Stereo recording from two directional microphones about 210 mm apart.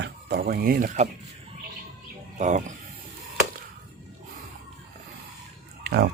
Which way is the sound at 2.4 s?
35° right (ahead or behind).